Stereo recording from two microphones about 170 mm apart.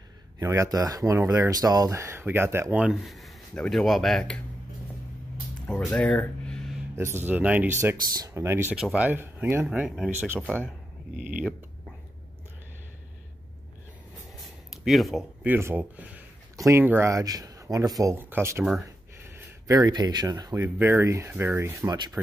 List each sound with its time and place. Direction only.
0.4 s speech: 20° right (ahead or behind); by 4.4 s 5° left (ahead or behind)
5.9 s a sound: 5° left (ahead or behind)
7.0 s speech: 15° right (ahead or behind)
14.7 s speech: centre (ahead or behind)
15.4 s speech: 10° right (ahead or behind)